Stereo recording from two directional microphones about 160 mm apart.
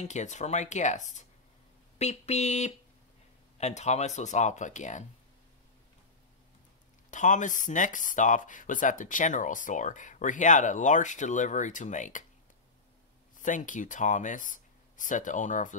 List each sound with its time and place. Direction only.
0.0 s speech: 45° left (ahead or behind)
7.1 s speech: 50° left (ahead or behind)
13.4 s speech: 55° left (ahead or behind)